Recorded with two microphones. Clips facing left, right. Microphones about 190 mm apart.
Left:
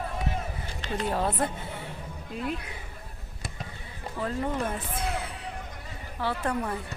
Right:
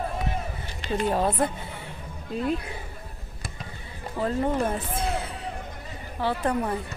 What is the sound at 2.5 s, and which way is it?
Speech, 30° right (ahead or behind).